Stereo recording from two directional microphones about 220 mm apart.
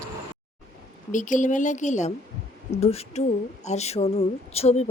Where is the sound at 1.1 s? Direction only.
35° left (ahead or behind).